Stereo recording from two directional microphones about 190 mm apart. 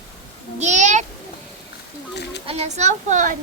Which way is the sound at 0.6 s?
40° right (ahead or behind).